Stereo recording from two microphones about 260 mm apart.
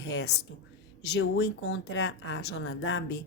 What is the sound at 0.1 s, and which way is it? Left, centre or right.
Speech, left.